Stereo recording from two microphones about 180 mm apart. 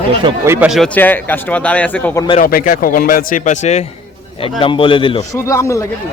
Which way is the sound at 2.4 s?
50° left (ahead or behind).